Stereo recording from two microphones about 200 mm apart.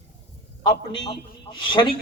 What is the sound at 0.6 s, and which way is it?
A man's voice, 20° left (ahead or behind).